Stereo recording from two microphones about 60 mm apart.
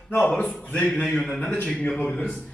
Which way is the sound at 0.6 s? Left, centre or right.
Left.